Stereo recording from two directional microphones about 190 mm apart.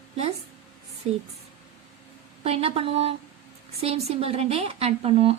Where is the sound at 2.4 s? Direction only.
30° right (ahead or behind).